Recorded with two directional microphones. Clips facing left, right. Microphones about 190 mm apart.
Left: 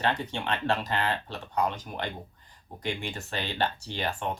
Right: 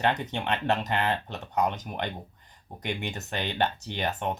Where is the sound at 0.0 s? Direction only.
20° right (ahead or behind).